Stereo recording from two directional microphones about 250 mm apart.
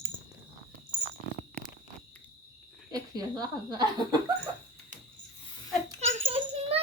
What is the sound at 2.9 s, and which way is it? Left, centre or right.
Speech, centre.